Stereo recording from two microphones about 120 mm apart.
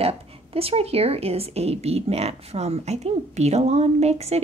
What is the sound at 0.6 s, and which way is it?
Speech, 55° right (ahead or behind).